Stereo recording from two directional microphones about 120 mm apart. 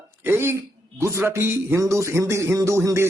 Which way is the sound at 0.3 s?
20° right (ahead or behind).